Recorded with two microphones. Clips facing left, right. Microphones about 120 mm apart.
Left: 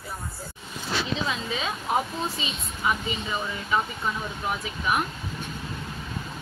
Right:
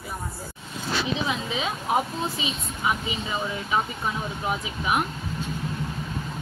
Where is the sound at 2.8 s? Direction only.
15° right (ahead or behind).